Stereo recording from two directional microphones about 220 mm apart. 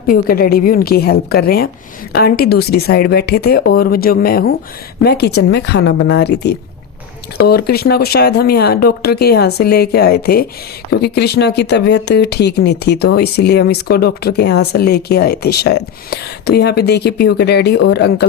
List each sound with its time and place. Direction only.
0.1 s speech: 45° left (ahead or behind)